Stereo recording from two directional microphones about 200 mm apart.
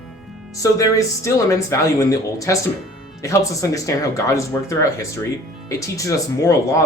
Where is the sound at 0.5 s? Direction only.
15° left (ahead or behind).